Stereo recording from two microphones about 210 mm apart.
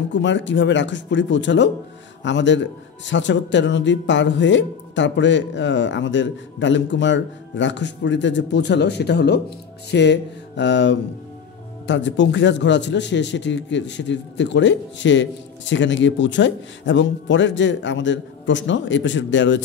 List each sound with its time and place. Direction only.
0.1 s a man's voice: 60° left (ahead or behind)